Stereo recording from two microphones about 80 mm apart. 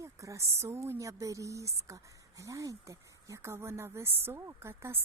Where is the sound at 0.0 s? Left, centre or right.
Right.